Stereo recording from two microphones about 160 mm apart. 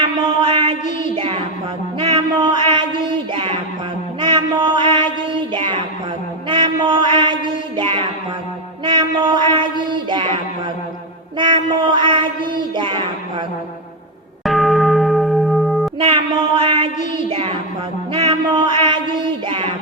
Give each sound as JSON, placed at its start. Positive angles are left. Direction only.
{"t": 0.4, "sound": "a sound", "side_deg": -35}
{"t": 4.2, "sound": "music", "side_deg": -30}
{"t": 6.5, "sound": "mantra", "side_deg": -30}
{"t": 7.8, "sound": "music", "side_deg": -35}
{"t": 8.8, "sound": "a sound", "side_deg": -30}
{"t": 10.1, "sound": "child singing", "side_deg": -30}
{"t": 14.4, "sound": "church bell", "side_deg": 0}
{"t": 16.0, "sound": "a sound", "side_deg": -35}
{"t": 18.1, "sound": "music", "side_deg": -30}
{"t": 19.2, "sound": "child singing", "side_deg": -30}